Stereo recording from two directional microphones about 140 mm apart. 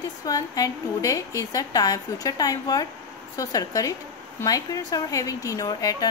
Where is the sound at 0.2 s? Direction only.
25° left (ahead or behind).